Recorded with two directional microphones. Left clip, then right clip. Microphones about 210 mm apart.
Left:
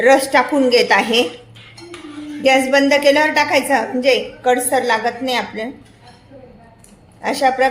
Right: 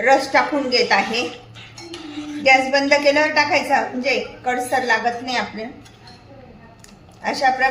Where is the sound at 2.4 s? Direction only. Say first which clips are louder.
Left 2 dB; 50° left (ahead or behind).